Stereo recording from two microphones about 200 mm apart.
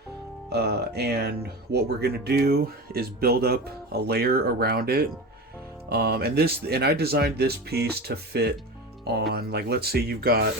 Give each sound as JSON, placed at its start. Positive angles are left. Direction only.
{"t": 0.5, "sound": "speech", "side_deg": -55}